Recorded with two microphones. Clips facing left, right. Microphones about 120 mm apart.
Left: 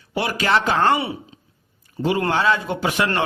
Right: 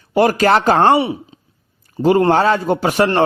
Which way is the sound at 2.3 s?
40° right (ahead or behind).